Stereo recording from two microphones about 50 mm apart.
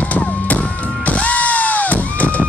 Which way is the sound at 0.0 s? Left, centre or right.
Left.